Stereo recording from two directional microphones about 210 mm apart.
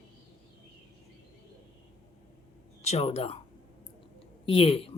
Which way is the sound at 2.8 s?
30° left (ahead or behind).